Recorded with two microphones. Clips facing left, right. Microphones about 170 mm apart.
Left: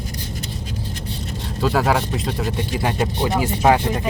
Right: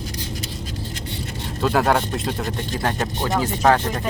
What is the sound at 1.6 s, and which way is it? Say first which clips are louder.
Speech: even; centre (ahead or behind).